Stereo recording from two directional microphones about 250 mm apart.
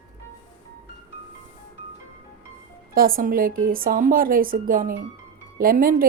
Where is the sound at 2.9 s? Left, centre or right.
Right.